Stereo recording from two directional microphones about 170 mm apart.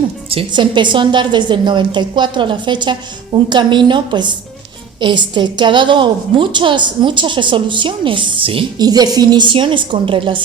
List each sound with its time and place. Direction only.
0.3 s a woman's voice: 30° right (ahead or behind)